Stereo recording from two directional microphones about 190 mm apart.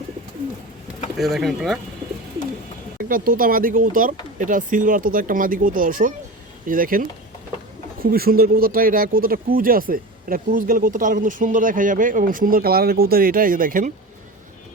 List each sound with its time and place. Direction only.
1.2 s speech: centre (ahead or behind)
3.0 s speech: 45° right (ahead or behind)
8.1 s speech: 55° right (ahead or behind)